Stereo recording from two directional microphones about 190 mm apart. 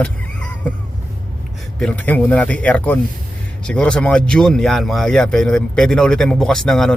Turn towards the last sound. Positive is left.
turn(degrees=0)  # may be behind; listen again after turning